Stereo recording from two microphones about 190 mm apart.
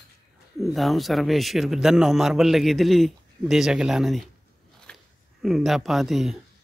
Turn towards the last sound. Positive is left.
turn(degrees=0)  # may be behind; listen again after turning